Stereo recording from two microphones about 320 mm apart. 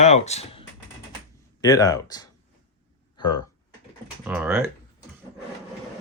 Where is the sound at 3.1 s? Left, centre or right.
Centre.